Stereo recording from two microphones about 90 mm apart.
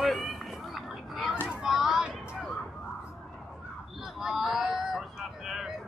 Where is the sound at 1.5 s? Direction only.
5° right (ahead or behind).